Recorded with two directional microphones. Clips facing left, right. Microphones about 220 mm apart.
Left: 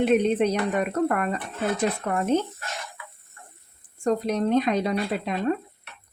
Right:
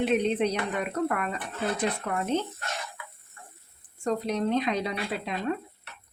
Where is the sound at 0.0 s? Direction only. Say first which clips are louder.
Left 4 dB; 50° left (ahead or behind).